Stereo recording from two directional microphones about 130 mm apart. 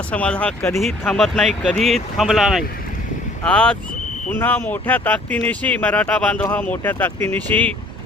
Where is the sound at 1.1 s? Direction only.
Centre (ahead or behind).